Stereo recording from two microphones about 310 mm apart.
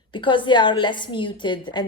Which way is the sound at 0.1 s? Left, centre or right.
Centre.